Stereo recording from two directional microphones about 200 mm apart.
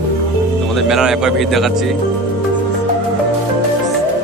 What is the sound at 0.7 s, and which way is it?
A man's voice, centre (ahead or behind).